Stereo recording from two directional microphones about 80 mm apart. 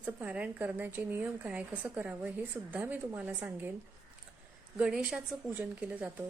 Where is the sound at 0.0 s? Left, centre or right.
Centre.